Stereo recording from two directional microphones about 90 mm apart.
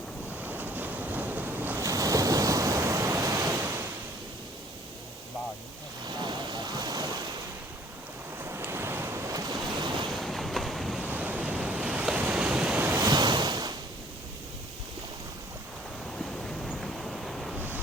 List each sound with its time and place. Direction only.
0.4 s waves: 20° right (ahead or behind)
1.8 s waves: 40° right (ahead or behind)
6.1 s a sound: 55° right (ahead or behind)
8.4 s waves: 25° right (ahead or behind); by 9.6 s 40° right (ahead or behind)
9.7 s waves: 60° right (ahead or behind)
10.2 s boat: centre (ahead or behind)
11.0 s waves: 20° right (ahead or behind)
13.0 s waves: 50° right (ahead or behind)
16.1 s waves: 5° left (ahead or behind)